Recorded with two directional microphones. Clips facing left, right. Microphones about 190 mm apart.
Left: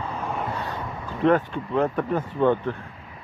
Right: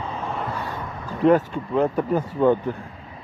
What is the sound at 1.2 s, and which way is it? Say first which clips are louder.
Speech: right 3 dB; 5° right (ahead or behind).